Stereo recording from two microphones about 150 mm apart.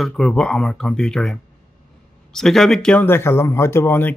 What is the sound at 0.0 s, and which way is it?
Speech, 5° left (ahead or behind).